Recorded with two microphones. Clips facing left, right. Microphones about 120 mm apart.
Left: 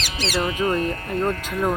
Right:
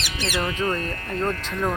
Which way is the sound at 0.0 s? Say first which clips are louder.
Left 2 dB; 35° left (ahead or behind).